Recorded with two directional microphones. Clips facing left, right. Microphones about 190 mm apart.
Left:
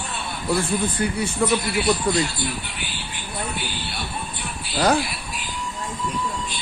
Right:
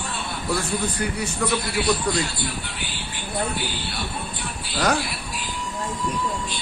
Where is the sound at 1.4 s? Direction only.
30° left (ahead or behind).